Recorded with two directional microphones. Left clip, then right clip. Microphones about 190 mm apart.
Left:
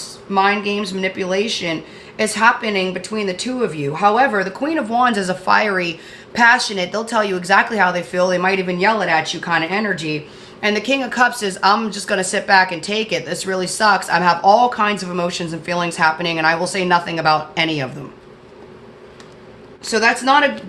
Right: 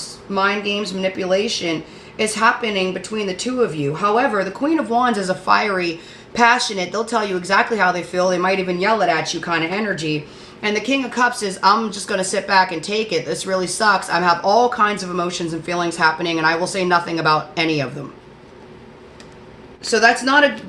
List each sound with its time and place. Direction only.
0.3 s speech: 40° left (ahead or behind)
19.9 s speech: 40° left (ahead or behind)